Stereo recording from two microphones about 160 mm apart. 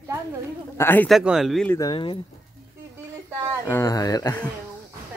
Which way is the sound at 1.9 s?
30° left (ahead or behind).